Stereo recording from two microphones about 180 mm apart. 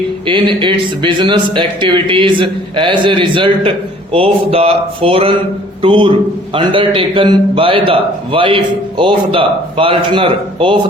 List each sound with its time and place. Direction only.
0.3 s speech: 25° right (ahead or behind)
4.1 s a sound: 30° right (ahead or behind)
5.8 s speech: 30° right (ahead or behind)